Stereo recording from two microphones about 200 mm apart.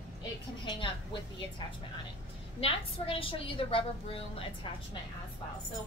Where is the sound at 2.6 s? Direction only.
30° left (ahead or behind).